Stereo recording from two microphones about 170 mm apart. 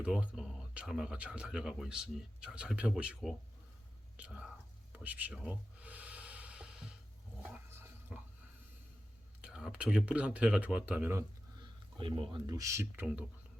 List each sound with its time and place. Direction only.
0.0 s speech: 5° right (ahead or behind)
4.2 s whispering: 5° right (ahead or behind)
7.4 s a sound: 10° right (ahead or behind)
9.4 s speech: 5° right (ahead or behind)
11.9 s speech: 30° right (ahead or behind)
12.5 s speech: 20° right (ahead or behind)